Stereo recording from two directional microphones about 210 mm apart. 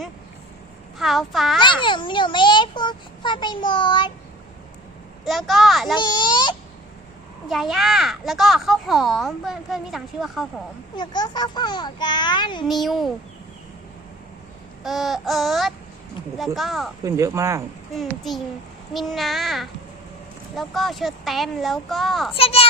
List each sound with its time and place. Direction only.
0.9 s speech: centre (ahead or behind)
1.6 s a child's voice: 25° left (ahead or behind)
5.2 s speech: centre (ahead or behind)
6.0 s a child's voice: 20° left (ahead or behind)
7.4 s speech: centre (ahead or behind)
10.9 s a child's voice: 20° left (ahead or behind)
12.6 s speech: centre (ahead or behind)
14.8 s speech: centre (ahead or behind)
17.0 s speech: 15° right (ahead or behind)
17.9 s speech: centre (ahead or behind)
22.4 s a child's voice: 25° left (ahead or behind)